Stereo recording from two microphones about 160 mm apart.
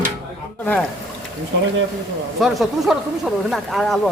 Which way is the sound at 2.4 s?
Centre (ahead or behind).